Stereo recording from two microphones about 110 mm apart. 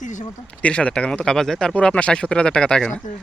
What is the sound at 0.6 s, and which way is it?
Speech, 10° left (ahead or behind).